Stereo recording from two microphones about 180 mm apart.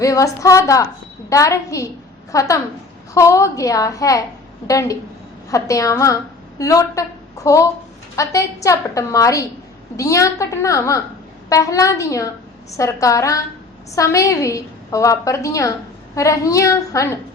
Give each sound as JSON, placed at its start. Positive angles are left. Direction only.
{"t": 0.0, "sound": "a woman's voice", "side_deg": 20}